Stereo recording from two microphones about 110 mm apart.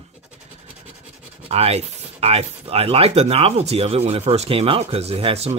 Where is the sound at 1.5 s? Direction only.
70° right (ahead or behind).